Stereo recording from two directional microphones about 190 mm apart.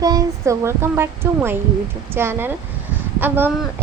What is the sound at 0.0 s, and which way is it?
A woman's voice, 20° right (ahead or behind).